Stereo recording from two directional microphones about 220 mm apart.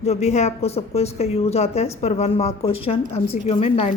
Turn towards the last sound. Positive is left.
turn(degrees=25)  # may be behind; listen again after turning